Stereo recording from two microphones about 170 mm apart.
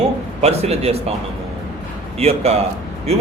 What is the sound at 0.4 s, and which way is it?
Speech, 40° right (ahead or behind).